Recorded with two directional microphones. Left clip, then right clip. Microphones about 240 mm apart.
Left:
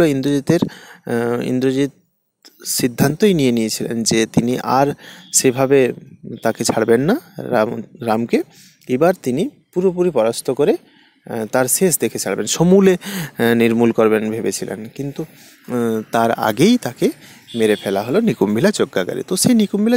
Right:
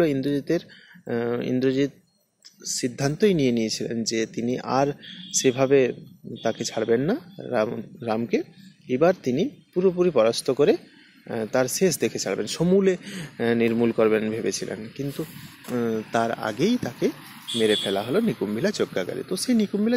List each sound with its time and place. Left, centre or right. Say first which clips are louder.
0.0 s speech: left 7 dB; left